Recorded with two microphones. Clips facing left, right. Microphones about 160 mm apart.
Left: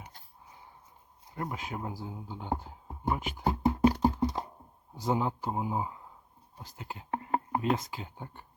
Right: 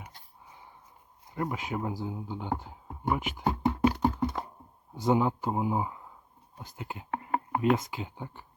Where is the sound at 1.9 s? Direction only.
20° right (ahead or behind).